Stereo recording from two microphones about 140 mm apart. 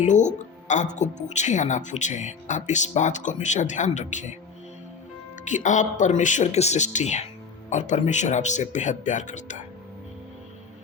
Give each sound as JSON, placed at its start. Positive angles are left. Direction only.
{"t": 0.0, "sound": "a woman's voice", "side_deg": 60}
{"t": 5.5, "sound": "a woman's voice", "side_deg": 60}